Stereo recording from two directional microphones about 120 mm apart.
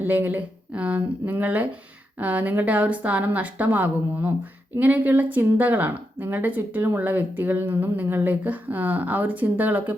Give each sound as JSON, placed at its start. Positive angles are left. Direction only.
{"t": 0.0, "sound": "speech", "side_deg": -15}